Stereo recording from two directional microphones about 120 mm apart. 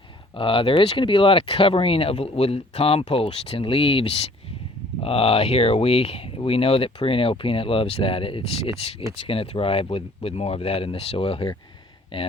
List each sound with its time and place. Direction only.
0.3 s speech: 50° left (ahead or behind)